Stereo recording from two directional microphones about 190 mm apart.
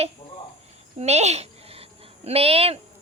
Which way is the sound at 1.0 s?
35° right (ahead or behind).